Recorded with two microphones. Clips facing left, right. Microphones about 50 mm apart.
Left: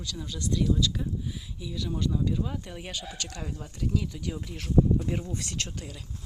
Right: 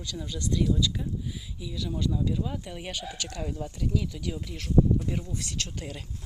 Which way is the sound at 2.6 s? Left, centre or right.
Centre.